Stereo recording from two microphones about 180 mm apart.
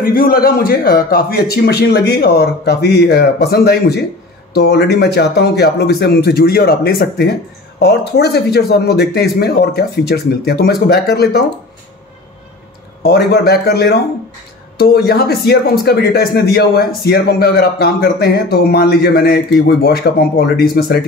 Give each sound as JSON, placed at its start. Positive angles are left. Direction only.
{"t": 0.0, "sound": "a man's voice", "side_deg": 50}
{"t": 13.0, "sound": "a man's voice", "side_deg": 65}